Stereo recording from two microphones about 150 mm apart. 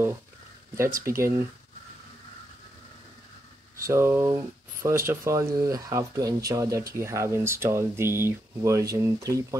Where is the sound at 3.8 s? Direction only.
20° right (ahead or behind).